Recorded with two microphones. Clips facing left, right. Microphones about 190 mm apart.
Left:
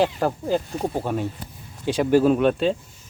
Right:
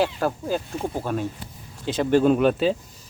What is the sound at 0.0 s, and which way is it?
Speech, 15° left (ahead or behind).